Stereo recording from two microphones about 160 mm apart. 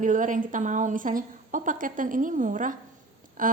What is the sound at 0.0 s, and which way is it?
A woman's voice, 55° right (ahead or behind).